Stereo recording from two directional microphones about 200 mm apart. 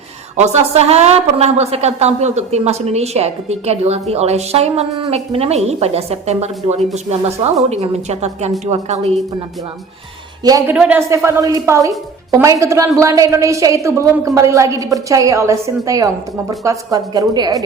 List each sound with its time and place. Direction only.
0.3 s a woman's voice: 35° right (ahead or behind)
10.4 s a woman's voice: 20° right (ahead or behind)